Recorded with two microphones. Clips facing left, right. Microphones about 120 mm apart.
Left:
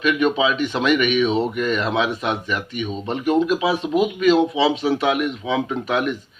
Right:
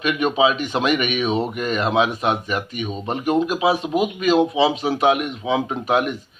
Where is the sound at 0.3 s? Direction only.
40° right (ahead or behind).